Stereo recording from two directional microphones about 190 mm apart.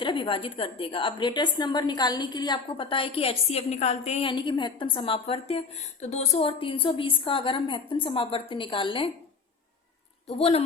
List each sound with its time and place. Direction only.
0.0 s a woman's voice: 25° left (ahead or behind)
10.2 s a woman's voice: 30° left (ahead or behind)